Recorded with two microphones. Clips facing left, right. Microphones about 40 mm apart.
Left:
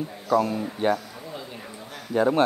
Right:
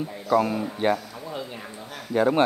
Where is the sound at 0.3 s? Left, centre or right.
Right.